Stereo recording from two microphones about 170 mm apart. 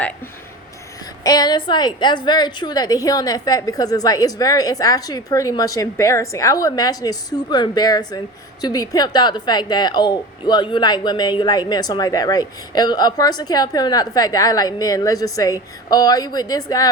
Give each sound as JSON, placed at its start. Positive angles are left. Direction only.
{"t": 1.2, "sound": "a woman's voice", "side_deg": 25}